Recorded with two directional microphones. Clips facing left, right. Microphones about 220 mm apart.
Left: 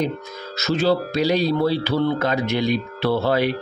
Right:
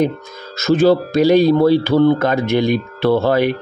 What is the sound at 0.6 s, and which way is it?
Speech, 50° right (ahead or behind).